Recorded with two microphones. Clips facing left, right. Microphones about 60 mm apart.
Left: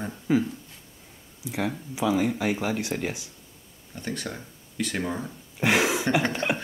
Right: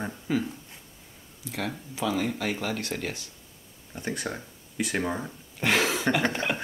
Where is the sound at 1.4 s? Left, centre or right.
Centre.